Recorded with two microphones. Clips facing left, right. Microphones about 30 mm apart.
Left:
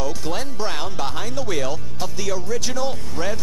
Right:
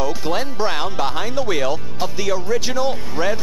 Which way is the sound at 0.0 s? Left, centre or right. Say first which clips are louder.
Right 5 dB; centre.